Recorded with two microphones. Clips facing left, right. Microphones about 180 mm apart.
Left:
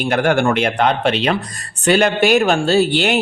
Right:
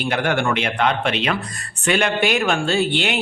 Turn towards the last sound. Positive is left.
turn(degrees=40)  # may be behind; listen again after turning